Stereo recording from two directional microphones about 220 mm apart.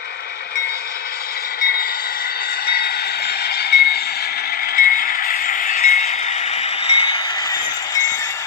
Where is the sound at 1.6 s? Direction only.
45° left (ahead or behind).